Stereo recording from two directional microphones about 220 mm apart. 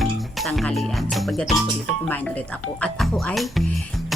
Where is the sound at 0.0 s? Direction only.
Centre (ahead or behind).